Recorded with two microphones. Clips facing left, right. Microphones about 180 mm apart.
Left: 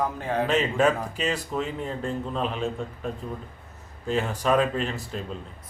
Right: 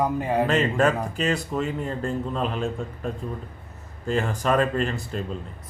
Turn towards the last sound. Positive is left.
turn(degrees=0)  # may be behind; listen again after turning